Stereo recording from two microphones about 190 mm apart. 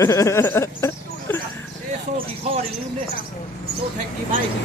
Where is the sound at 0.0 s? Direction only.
15° left (ahead or behind).